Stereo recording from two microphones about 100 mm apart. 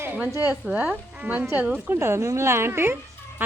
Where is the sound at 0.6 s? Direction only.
15° right (ahead or behind).